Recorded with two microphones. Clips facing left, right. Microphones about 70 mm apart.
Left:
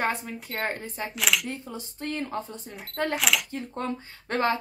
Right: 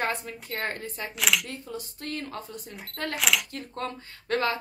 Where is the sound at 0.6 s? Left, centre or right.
Left.